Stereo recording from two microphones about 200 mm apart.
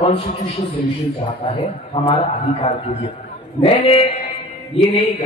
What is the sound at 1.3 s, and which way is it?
A man's voice, 25° left (ahead or behind).